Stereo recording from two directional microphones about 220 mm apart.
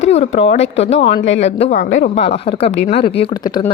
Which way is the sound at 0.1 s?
30° left (ahead or behind).